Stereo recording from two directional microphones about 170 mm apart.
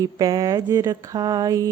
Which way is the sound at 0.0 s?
20° right (ahead or behind).